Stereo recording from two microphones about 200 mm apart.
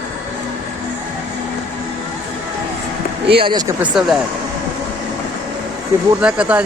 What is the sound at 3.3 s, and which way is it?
Speech, 25° right (ahead or behind).